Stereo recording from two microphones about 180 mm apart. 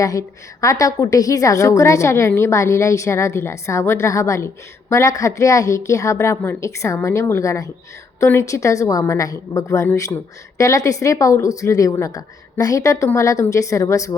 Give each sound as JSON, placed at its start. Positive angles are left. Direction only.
{"t": 0.0, "sound": "a woman's voice", "side_deg": 20}